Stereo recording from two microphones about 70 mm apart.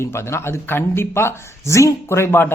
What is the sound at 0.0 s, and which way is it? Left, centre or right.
A man's voice, left.